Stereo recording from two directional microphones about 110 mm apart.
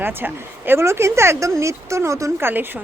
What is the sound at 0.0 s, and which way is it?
Speech, 20° right (ahead or behind).